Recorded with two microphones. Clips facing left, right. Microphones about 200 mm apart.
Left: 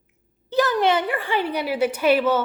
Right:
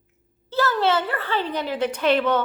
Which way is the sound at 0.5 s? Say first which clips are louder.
Left 2 dB; 15° left (ahead or behind).